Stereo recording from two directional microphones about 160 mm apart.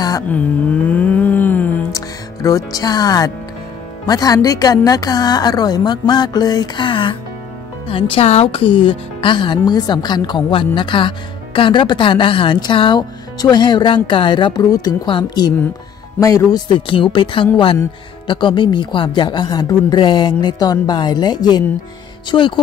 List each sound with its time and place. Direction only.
0.3 s music: 10° left (ahead or behind)
4.1 s a woman's voice: 25° left (ahead or behind)